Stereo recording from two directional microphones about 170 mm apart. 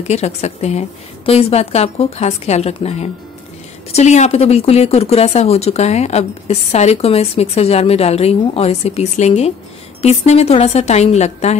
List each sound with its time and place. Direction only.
0.1 s speech: 40° left (ahead or behind)